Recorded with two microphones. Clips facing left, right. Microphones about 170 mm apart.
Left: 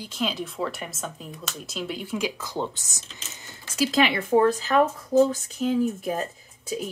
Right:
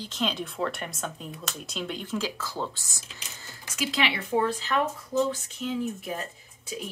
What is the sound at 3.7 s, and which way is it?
Speech, 45° left (ahead or behind).